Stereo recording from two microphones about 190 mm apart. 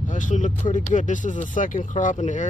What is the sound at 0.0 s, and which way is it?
Speech, 40° left (ahead or behind).